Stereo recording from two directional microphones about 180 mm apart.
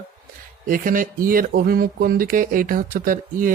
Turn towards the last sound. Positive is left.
turn(degrees=-50)  # may be behind; listen again after turning